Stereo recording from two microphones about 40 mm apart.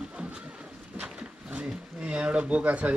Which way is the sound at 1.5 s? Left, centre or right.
Right.